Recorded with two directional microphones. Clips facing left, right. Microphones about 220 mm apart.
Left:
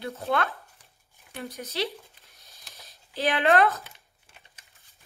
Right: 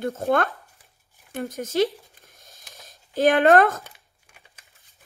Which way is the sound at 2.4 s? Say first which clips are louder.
Right 3 dB; 45° right (ahead or behind).